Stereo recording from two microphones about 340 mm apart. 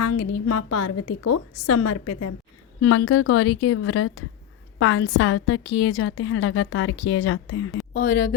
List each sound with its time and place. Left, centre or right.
0.0 s a woman's voice: left
7.9 s speech: left